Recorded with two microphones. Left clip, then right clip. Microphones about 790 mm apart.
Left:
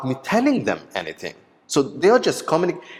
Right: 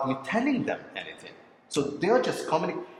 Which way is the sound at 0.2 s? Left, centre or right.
Left.